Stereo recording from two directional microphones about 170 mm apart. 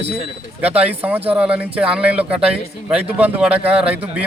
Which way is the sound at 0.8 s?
10° right (ahead or behind).